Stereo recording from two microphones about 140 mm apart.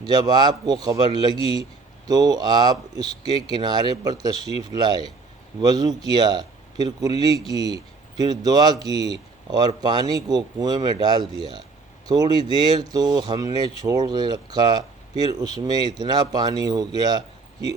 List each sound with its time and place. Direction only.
0.0 s speech: 30° right (ahead or behind)